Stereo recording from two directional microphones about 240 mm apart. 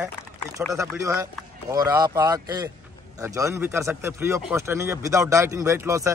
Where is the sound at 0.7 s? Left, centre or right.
Centre.